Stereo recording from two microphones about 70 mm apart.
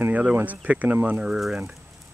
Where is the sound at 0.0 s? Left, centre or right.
Right.